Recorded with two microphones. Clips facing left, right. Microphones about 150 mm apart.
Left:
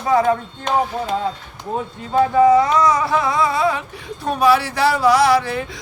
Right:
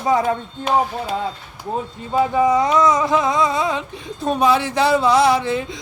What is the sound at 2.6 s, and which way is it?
Speech, 20° right (ahead or behind).